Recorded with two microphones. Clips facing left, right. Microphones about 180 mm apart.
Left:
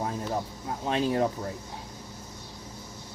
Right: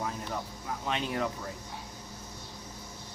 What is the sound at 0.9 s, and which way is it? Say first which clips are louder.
Speech: left 7 dB; 30° left (ahead or behind).